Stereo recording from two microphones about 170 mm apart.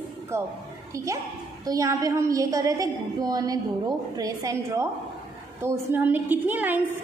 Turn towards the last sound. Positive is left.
turn(degrees=-10)  # may be behind; listen again after turning